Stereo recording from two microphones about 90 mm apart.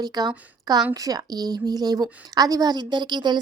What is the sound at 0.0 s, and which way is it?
A woman's voice, 50° right (ahead or behind).